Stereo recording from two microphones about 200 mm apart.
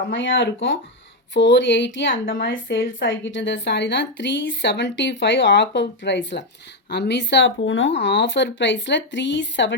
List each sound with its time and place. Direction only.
0.1 s a woman's voice: 65° left (ahead or behind)